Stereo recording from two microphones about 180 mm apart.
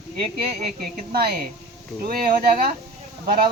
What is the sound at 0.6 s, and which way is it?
Speech, 55° right (ahead or behind).